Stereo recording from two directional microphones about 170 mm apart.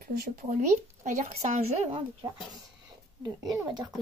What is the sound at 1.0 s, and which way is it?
Speech, 45° right (ahead or behind).